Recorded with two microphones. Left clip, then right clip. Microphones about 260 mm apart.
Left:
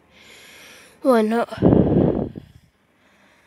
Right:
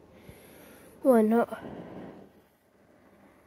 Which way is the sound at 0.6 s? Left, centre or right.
Left.